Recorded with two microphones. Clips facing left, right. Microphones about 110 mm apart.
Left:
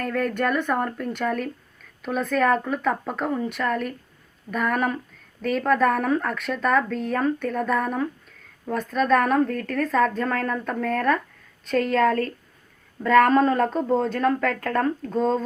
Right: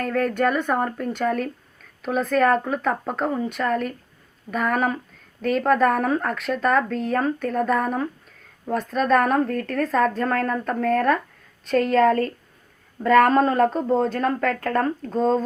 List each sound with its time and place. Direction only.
0.2 s a woman's voice: centre (ahead or behind)
9.0 s a woman's voice: centre (ahead or behind)